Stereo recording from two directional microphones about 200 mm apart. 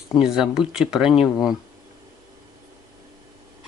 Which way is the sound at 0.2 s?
5° right (ahead or behind).